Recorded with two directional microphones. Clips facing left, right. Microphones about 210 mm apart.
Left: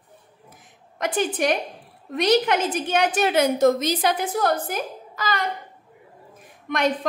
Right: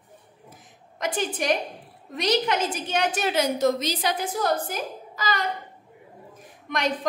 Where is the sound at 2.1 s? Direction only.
55° left (ahead or behind).